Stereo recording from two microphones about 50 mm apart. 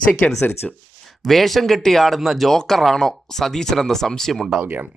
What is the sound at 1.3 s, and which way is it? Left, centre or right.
A man's voice, centre.